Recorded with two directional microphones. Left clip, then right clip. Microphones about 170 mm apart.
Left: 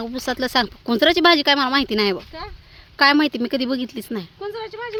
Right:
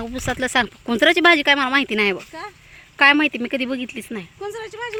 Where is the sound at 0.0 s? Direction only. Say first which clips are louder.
Even; 10° left (ahead or behind).